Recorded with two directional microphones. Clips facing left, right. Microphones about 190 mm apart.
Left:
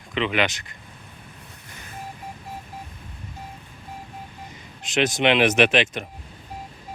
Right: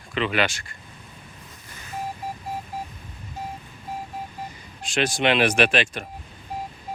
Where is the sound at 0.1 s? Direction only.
20° left (ahead or behind).